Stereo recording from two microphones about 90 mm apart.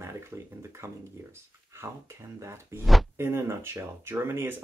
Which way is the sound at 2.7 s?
25° right (ahead or behind).